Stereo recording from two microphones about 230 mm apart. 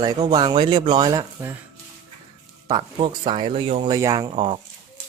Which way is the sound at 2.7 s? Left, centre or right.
Right.